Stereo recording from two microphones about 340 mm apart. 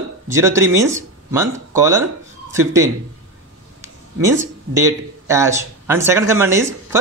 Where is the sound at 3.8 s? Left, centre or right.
Centre.